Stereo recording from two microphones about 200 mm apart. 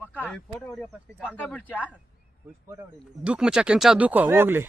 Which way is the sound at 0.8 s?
5° left (ahead or behind).